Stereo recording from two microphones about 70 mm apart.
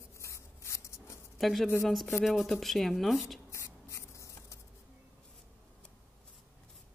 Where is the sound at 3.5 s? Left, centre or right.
Left.